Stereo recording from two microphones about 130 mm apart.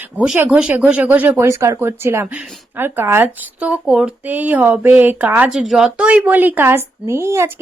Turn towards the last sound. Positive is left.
turn(degrees=-20)  # may be behind; listen again after turning